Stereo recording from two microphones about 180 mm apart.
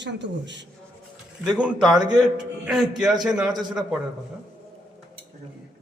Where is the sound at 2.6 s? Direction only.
5° right (ahead or behind).